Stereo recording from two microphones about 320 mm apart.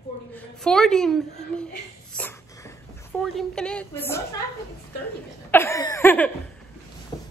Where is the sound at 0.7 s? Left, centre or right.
Centre.